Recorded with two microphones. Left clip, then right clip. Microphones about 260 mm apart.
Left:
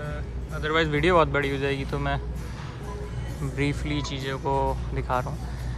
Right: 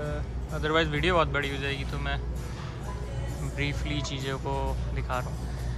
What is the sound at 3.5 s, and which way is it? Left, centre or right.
Speech, centre.